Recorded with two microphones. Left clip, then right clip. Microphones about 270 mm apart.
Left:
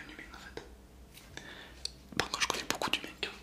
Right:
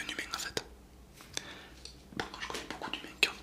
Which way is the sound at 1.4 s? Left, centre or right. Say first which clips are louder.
Right 6 dB; centre.